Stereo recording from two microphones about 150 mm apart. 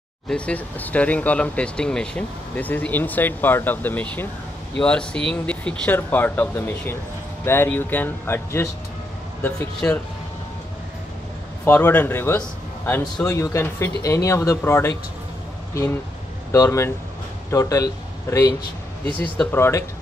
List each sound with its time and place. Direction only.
0.3 s speech: 10° left (ahead or behind)
9.8 s speech: 10° left (ahead or behind)
11.6 s speech: 15° left (ahead or behind)
19.0 s speech: 10° left (ahead or behind)